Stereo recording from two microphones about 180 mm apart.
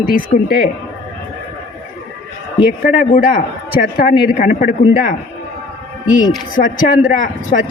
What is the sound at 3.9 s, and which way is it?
Speech, 50° left (ahead or behind).